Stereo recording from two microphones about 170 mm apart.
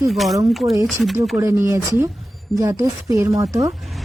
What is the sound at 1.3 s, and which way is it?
Speech, 15° right (ahead or behind).